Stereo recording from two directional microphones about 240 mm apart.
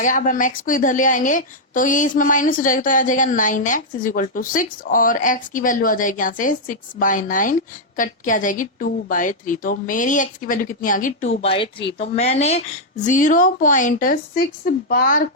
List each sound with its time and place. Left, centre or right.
0.0 s a woman's voice: left